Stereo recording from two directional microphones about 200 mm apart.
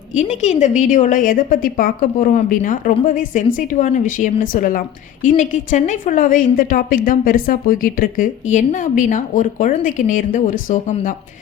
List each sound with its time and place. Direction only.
0.1 s a woman's voice: 35° left (ahead or behind)